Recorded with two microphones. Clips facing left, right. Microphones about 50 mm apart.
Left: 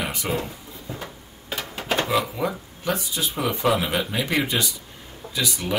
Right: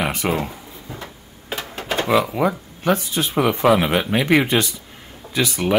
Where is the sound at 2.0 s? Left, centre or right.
Right.